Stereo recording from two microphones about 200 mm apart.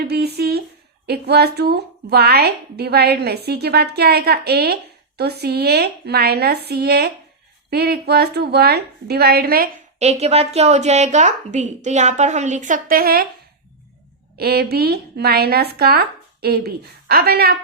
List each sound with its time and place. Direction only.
0.0 s speech: 55° right (ahead or behind)
10.0 s a woman's voice: 35° right (ahead or behind)
14.3 s speech: 50° right (ahead or behind)